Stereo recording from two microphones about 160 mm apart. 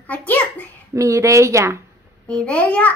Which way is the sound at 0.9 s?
20° right (ahead or behind).